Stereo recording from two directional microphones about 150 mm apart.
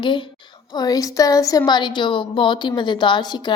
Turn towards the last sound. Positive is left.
turn(degrees=30)  # may be behind; listen again after turning